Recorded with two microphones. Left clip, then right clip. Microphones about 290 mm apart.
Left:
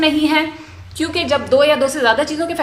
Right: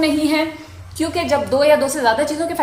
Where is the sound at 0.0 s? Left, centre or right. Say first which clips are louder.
Left 2 dB; left.